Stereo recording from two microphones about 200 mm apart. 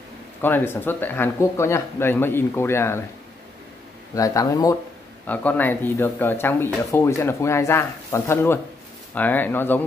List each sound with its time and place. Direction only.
0.4 s speech: 10° left (ahead or behind)
4.1 s speech: 15° left (ahead or behind)